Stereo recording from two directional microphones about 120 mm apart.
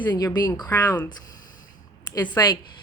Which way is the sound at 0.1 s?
35° left (ahead or behind).